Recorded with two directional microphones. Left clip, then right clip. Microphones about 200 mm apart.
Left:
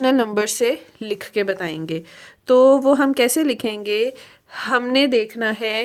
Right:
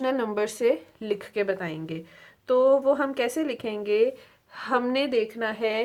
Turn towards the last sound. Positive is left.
turn(degrees=40)  # may be behind; listen again after turning